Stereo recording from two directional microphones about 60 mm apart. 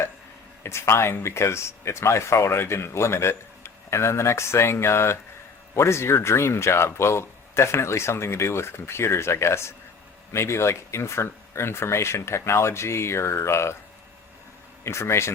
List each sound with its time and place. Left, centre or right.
0.6 s speech: left
14.8 s speech: left